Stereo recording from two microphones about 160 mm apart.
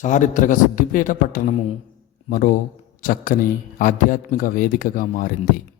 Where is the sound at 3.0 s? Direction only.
60° left (ahead or behind).